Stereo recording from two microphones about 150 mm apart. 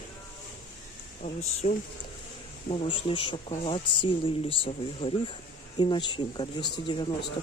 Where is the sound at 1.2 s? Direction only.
50° left (ahead or behind).